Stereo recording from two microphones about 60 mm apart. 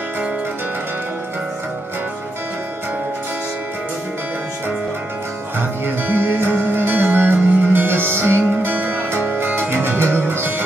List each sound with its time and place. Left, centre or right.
5.6 s music: right